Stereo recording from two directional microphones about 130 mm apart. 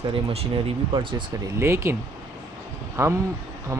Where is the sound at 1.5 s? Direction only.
20° right (ahead or behind).